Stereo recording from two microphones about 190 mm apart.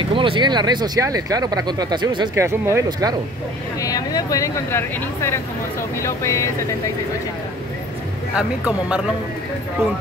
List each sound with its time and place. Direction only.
0.1 s speech: 25° right (ahead or behind)
3.8 s speech: 20° left (ahead or behind)
8.4 s speech: 5° right (ahead or behind)